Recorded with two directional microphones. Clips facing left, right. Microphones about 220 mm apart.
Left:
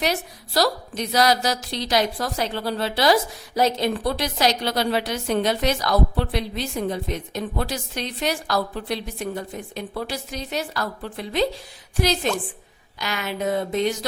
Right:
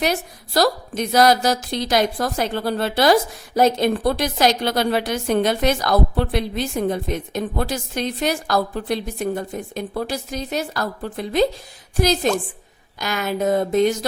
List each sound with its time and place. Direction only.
0.0 s a woman's voice: 50° right (ahead or behind)